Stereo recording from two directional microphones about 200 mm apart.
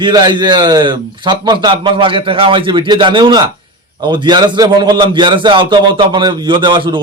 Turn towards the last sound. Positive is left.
turn(degrees=-25)  # may be behind; listen again after turning